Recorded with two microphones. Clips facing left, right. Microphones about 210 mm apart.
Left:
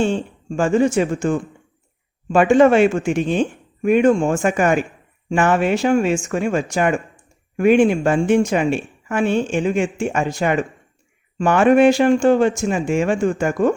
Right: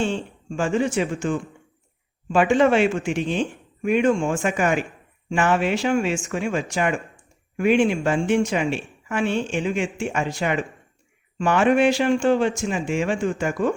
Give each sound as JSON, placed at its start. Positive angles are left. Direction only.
{"t": 0.0, "sound": "speech", "side_deg": 45}